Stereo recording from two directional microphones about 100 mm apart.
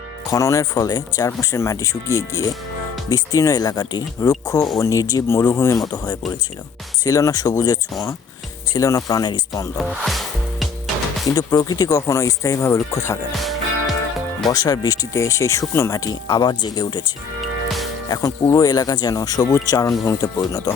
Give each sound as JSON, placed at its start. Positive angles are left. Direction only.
{"t": 0.3, "sound": "speech", "side_deg": 30}
{"t": 5.9, "sound": "speech", "side_deg": 40}
{"t": 9.7, "sound": "music", "side_deg": 0}
{"t": 11.3, "sound": "speech", "side_deg": 40}
{"t": 14.4, "sound": "speech", "side_deg": 40}
{"t": 16.0, "sound": "speech", "side_deg": 45}
{"t": 18.1, "sound": "speech", "side_deg": 30}